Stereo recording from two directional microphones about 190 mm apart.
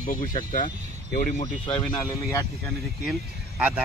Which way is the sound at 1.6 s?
25° left (ahead or behind).